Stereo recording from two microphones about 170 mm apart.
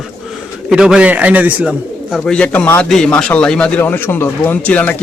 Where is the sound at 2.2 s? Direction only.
5° left (ahead or behind).